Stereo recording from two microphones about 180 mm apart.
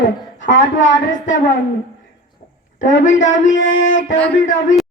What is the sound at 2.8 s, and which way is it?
A man's voice, 45° left (ahead or behind).